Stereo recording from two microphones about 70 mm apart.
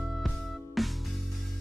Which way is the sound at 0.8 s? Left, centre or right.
Centre.